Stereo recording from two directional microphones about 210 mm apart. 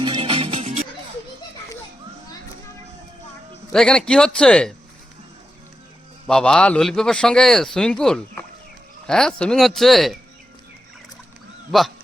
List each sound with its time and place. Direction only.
0.0 s music: 25° right (ahead or behind)
3.7 s speech: 5° left (ahead or behind)
6.2 s speech: 5° left (ahead or behind)
11.7 s speech: centre (ahead or behind)